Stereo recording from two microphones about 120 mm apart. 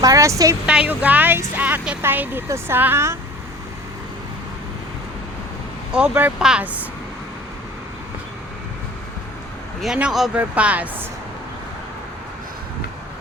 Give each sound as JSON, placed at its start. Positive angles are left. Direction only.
{"t": 0.0, "sound": "speech", "side_deg": -25}
{"t": 0.6, "sound": "speech", "side_deg": -10}
{"t": 5.9, "sound": "speech", "side_deg": -10}
{"t": 9.8, "sound": "speech", "side_deg": -5}